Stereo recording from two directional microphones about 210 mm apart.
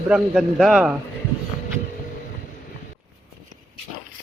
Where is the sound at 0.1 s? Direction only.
Centre (ahead or behind).